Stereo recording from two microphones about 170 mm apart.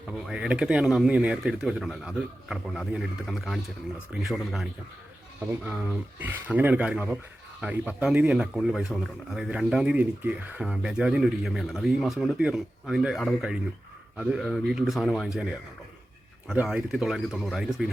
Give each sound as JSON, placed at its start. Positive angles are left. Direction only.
{"t": 0.1, "sound": "speech", "side_deg": -5}